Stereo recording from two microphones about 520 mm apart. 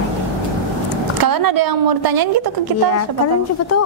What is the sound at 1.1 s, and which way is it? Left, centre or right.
Speech, right.